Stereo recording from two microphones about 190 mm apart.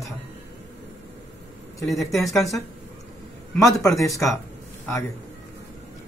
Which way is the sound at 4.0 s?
15° left (ahead or behind).